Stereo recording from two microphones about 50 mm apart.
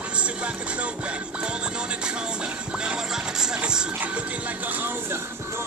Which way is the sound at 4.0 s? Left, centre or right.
Right.